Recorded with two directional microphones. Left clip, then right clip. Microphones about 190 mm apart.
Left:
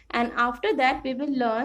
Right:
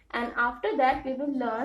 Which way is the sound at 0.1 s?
60° left (ahead or behind).